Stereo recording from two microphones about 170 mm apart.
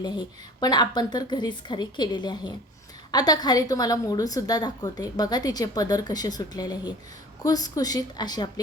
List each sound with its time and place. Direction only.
0.0 s a woman's voice: 25° left (ahead or behind)